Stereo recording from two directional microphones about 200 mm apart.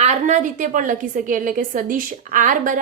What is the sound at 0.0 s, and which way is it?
A woman's voice, 35° right (ahead or behind).